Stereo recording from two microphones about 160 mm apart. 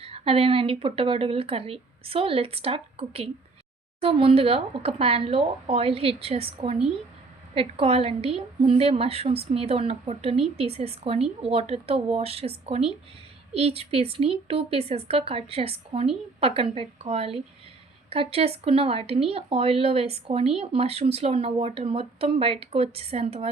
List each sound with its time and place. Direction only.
0.0 s speech: 35° right (ahead or behind)